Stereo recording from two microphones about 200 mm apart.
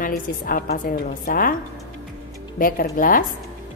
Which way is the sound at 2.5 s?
45° left (ahead or behind).